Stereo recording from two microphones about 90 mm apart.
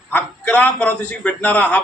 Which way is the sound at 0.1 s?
20° left (ahead or behind).